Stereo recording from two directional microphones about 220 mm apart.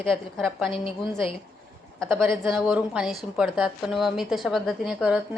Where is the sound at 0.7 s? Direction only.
25° left (ahead or behind).